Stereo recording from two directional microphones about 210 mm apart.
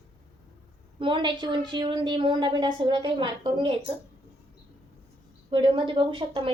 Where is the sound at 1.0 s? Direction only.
25° right (ahead or behind).